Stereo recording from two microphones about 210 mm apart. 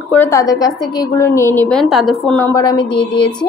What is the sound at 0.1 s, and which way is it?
A woman's voice, 10° left (ahead or behind).